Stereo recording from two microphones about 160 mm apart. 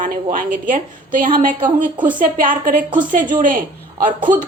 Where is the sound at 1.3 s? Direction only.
60° right (ahead or behind).